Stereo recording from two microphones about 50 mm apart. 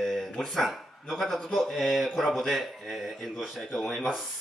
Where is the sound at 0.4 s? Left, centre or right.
Centre.